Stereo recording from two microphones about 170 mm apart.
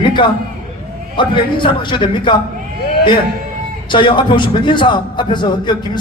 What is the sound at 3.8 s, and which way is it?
A man's voice, 30° left (ahead or behind).